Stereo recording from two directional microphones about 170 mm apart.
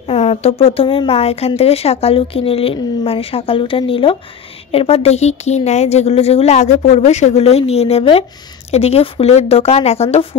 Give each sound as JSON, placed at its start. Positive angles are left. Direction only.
{"t": 0.1, "sound": "speech", "side_deg": 35}